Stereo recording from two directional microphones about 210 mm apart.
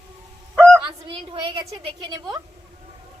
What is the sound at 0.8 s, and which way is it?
Speech, 25° right (ahead or behind).